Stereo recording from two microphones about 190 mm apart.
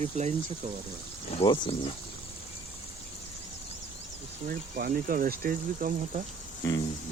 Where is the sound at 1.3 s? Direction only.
30° left (ahead or behind).